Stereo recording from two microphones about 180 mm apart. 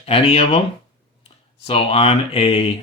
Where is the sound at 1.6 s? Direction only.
35° left (ahead or behind).